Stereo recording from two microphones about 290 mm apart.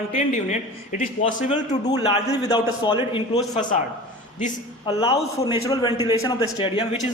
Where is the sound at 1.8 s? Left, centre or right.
Centre.